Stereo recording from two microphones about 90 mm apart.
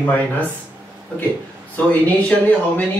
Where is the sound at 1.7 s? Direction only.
15° left (ahead or behind).